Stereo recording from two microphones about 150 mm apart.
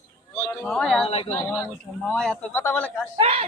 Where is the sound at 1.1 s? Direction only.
40° left (ahead or behind).